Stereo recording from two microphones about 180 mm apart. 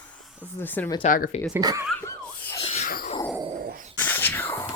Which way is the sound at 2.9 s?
50° left (ahead or behind).